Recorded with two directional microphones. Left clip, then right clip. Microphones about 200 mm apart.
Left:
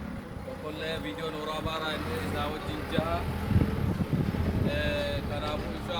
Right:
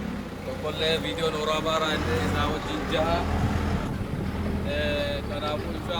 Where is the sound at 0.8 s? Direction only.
40° right (ahead or behind).